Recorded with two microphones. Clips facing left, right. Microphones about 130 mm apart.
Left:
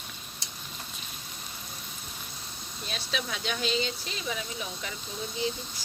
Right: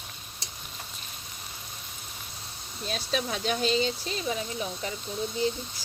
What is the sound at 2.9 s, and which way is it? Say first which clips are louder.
Speech: right 5 dB; 40° right (ahead or behind).